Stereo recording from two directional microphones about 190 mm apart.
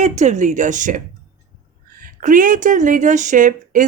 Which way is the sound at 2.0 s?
45° right (ahead or behind).